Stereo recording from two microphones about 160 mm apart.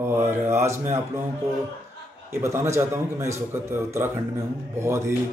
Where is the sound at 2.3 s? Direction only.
15° right (ahead or behind).